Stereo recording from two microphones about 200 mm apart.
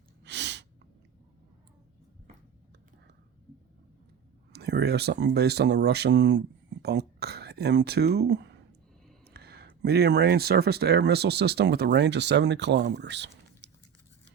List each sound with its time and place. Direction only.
0.3 s sneeze: 60° right (ahead or behind)
4.5 s speech: 55° right (ahead or behind)